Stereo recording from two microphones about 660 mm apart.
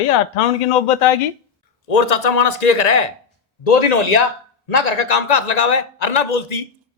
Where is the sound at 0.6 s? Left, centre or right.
Left.